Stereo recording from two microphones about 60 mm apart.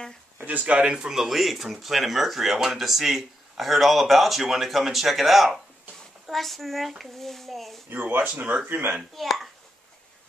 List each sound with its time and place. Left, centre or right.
0.7 s speech: centre
7.9 s speech: right
8.3 s speech: right
9.1 s speech: centre